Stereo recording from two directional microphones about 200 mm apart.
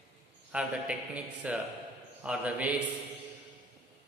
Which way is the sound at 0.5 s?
5° right (ahead or behind).